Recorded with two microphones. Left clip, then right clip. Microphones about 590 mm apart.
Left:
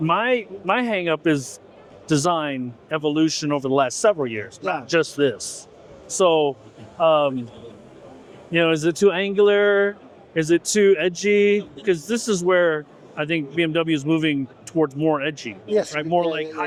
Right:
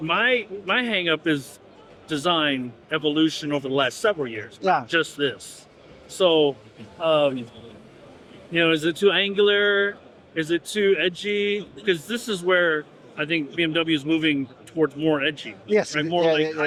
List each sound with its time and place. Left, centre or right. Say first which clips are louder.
0.1 s speech: even; left
8.5 s speech: left 2 dB; left
15.7 s a man's voice: left 1 dB; right